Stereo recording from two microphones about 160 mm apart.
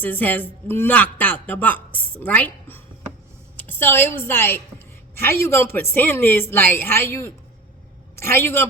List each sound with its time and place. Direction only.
0.0 s a woman's voice: 10° left (ahead or behind)